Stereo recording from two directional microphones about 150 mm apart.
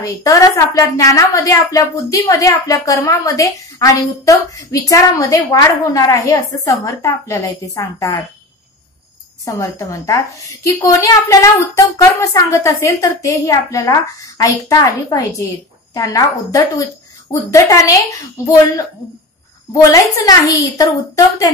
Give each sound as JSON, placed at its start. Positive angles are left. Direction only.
{"t": 0.0, "sound": "a woman's voice", "side_deg": 20}
{"t": 9.4, "sound": "a woman's voice", "side_deg": 20}